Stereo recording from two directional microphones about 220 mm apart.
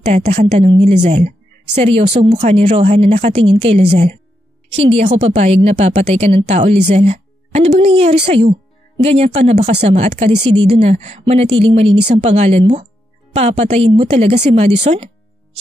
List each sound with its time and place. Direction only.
0.0 s a woman's voice: 30° right (ahead or behind)